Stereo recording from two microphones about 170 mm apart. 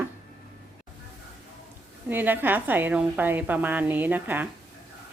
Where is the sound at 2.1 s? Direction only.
10° right (ahead or behind).